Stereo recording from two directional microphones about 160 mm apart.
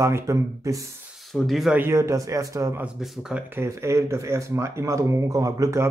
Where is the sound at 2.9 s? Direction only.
Centre (ahead or behind).